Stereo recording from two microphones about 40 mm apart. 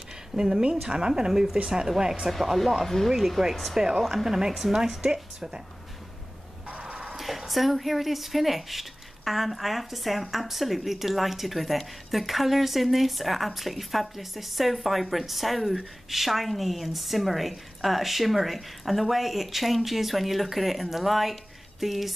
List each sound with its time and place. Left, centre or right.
0.4 s speech: centre
2.3 s a woman's voice: centre
6.8 s a sound: right
7.2 s a woman's voice: centre